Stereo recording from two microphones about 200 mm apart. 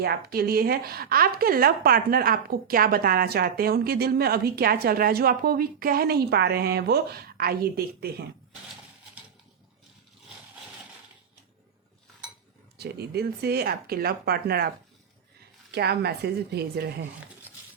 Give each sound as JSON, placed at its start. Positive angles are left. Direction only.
{"t": 0.0, "sound": "speech", "side_deg": -50}
{"t": 12.7, "sound": "speech", "side_deg": -55}
{"t": 15.7, "sound": "speech", "side_deg": -55}